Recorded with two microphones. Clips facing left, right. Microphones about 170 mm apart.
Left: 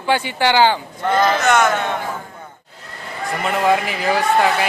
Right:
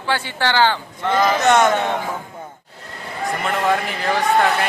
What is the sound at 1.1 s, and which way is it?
Speech, centre (ahead or behind).